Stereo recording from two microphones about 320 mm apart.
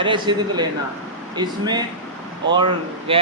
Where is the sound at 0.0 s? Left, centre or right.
Centre.